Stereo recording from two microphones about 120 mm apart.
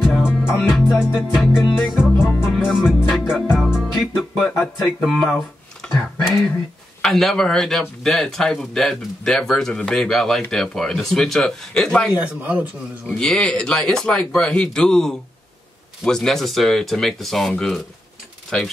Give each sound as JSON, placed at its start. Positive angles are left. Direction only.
{"t": 0.0, "sound": "music", "side_deg": -5}
{"t": 7.0, "sound": "music", "side_deg": 0}
{"t": 12.1, "sound": "a man's voice", "side_deg": -15}
{"t": 13.0, "sound": "music", "side_deg": 5}